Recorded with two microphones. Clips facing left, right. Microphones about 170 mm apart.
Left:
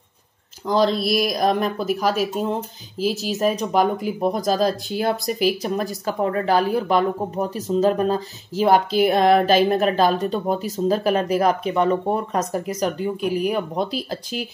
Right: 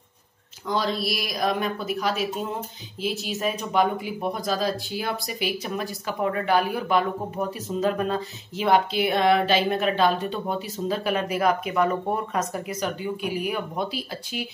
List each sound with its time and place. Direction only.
0.7 s speech: 35° left (ahead or behind)